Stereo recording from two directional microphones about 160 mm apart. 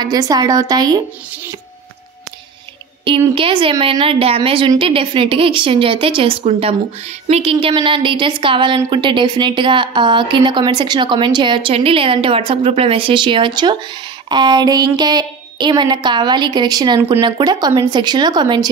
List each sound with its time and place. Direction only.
0.0 s a woman's voice: 25° right (ahead or behind)
3.1 s a woman's voice: 35° right (ahead or behind)